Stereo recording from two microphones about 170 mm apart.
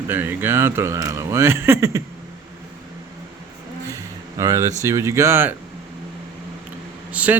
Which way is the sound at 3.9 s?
20° right (ahead or behind).